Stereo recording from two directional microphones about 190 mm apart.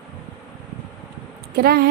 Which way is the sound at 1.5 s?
55° right (ahead or behind).